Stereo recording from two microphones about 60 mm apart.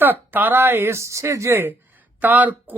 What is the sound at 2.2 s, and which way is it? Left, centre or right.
Speech, right.